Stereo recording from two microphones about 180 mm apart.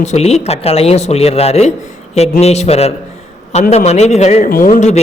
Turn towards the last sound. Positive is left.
turn(degrees=40)  # may be behind; listen again after turning